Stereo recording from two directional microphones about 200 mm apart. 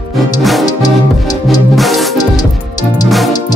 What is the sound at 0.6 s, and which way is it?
Music, 20° left (ahead or behind).